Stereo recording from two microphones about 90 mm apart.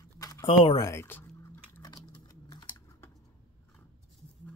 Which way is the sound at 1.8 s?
50° left (ahead or behind).